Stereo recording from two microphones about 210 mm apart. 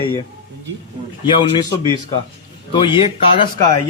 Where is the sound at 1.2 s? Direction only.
20° left (ahead or behind).